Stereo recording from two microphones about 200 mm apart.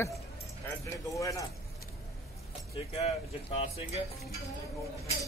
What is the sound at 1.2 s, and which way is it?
Speech, 15° left (ahead or behind).